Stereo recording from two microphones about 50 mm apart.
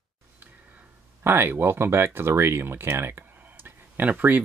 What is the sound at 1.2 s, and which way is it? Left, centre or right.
Speech, right.